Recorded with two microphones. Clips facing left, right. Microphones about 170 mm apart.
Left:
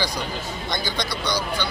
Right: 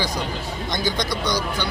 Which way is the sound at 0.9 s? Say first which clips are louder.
Right 2 dB; 45° right (ahead or behind).